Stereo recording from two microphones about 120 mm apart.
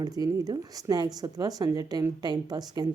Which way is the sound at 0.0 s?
30° right (ahead or behind).